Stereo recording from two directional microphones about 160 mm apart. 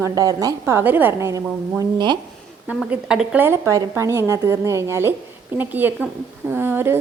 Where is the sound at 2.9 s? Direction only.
5° right (ahead or behind).